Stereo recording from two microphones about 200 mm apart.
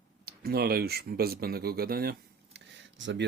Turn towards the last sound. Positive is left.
turn(degrees=-65)  # may be behind; listen again after turning